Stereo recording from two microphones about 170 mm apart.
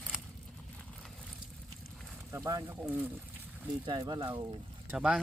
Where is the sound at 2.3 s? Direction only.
20° right (ahead or behind).